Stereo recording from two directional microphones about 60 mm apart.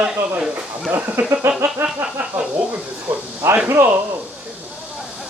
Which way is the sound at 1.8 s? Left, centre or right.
Right.